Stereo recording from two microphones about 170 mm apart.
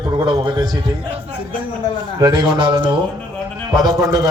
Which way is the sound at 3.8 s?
20° right (ahead or behind).